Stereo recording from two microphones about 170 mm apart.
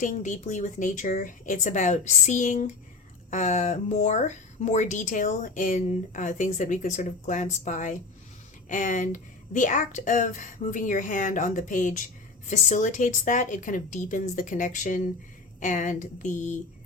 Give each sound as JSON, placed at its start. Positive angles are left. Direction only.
{"t": 0.0, "sound": "speech", "side_deg": 50}